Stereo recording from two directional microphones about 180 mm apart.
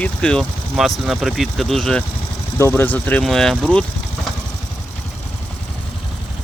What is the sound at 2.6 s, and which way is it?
Speech, 10° left (ahead or behind).